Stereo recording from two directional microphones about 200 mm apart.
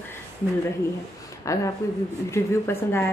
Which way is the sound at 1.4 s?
15° left (ahead or behind).